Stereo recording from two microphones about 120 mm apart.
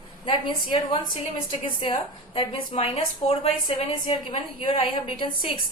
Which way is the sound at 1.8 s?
45° left (ahead or behind).